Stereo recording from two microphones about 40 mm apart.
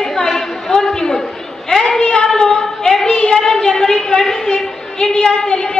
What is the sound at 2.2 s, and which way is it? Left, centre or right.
A woman's voice, centre.